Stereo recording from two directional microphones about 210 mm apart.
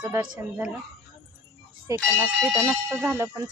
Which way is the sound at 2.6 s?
15° right (ahead or behind).